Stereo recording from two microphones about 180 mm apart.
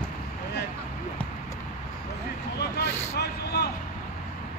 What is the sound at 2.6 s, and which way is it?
Vehicle, 65° left (ahead or behind).